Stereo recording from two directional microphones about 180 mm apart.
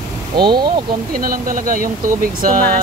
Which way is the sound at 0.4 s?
25° right (ahead or behind).